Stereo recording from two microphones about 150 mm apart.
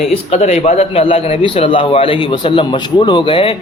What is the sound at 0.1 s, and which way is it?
A man's voice, 45° left (ahead or behind).